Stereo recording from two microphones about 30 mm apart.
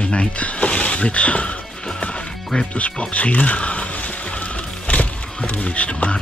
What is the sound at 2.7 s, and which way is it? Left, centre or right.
Music, left.